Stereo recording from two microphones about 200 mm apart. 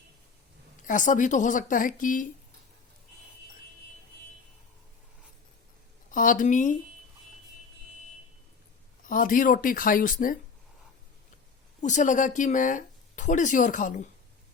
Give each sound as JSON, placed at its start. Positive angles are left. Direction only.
{"t": 0.9, "sound": "speech", "side_deg": 40}
{"t": 6.1, "sound": "speech", "side_deg": 40}
{"t": 9.0, "sound": "speech", "side_deg": 45}
{"t": 11.8, "sound": "speech", "side_deg": 40}